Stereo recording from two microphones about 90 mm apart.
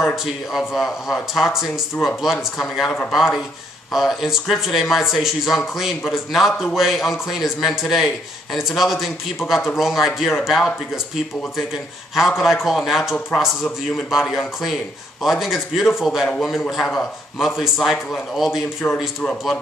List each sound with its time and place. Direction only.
0.1 s a man's voice: centre (ahead or behind)
3.1 s a man's voice: 5° right (ahead or behind)
12.2 s a man's voice: centre (ahead or behind)
18.8 s a man's voice: 20° left (ahead or behind)